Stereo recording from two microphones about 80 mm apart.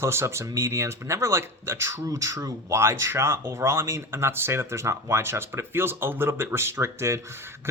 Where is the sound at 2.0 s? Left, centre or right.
Right.